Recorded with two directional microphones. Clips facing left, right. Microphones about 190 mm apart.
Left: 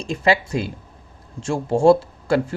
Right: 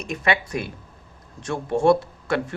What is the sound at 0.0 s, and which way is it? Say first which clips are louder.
Speech: left 4 dB; 30° left (ahead or behind).